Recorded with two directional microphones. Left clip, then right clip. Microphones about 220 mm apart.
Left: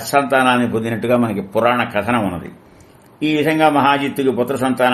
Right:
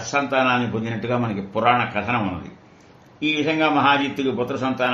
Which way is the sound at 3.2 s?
45° left (ahead or behind).